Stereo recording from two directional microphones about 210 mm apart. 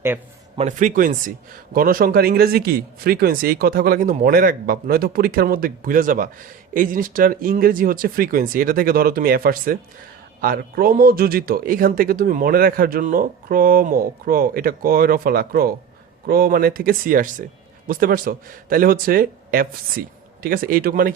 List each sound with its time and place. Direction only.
0.5 s speech: 35° right (ahead or behind)